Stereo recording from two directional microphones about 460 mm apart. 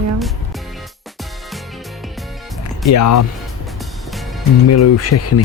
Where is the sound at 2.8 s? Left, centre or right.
Left.